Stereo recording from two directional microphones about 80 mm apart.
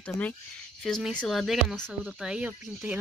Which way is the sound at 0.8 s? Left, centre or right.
Centre.